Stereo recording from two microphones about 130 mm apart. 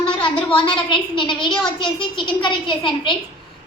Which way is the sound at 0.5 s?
40° left (ahead or behind).